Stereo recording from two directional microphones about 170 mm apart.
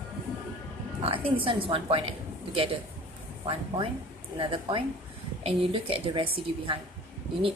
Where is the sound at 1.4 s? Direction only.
30° right (ahead or behind).